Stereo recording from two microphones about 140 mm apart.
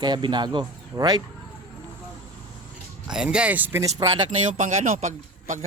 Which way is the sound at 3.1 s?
5° right (ahead or behind).